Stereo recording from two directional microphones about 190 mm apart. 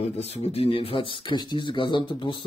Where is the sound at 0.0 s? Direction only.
35° left (ahead or behind).